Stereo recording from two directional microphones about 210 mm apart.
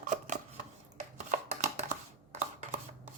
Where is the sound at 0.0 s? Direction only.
35° right (ahead or behind).